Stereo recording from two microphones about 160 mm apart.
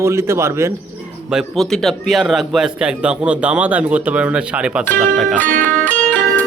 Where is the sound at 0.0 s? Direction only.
15° right (ahead or behind).